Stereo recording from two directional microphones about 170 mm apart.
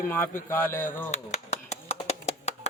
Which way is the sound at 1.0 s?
40° left (ahead or behind).